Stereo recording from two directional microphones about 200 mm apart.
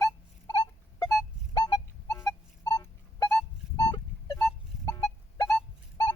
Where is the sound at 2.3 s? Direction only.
20° left (ahead or behind).